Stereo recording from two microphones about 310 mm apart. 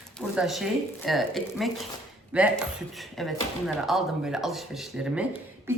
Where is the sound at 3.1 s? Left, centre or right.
Centre.